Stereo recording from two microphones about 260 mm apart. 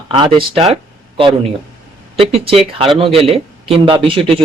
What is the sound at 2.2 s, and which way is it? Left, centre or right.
Speech, right.